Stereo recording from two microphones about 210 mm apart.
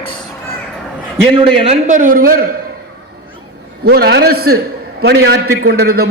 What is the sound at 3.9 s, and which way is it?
A man's voice, 50° right (ahead or behind).